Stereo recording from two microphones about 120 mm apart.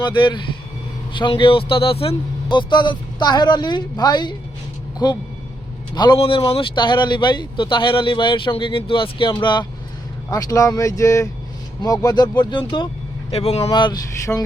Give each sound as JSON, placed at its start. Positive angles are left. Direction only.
{"t": 0.0, "sound": "a man's voice", "side_deg": 45}
{"t": 6.1, "sound": "speech", "side_deg": 50}
{"t": 10.3, "sound": "speech", "side_deg": 30}
{"t": 13.3, "sound": "speech", "side_deg": 60}
{"t": 13.7, "sound": "speech", "side_deg": 40}
{"t": 14.3, "sound": "a sound", "side_deg": 10}